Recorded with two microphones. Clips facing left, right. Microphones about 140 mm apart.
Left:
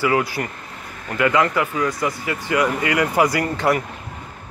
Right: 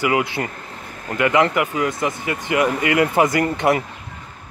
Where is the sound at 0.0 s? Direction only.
20° right (ahead or behind).